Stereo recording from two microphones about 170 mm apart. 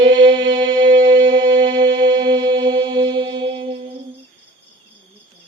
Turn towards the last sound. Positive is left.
turn(degrees=-35)  # may be behind; listen again after turning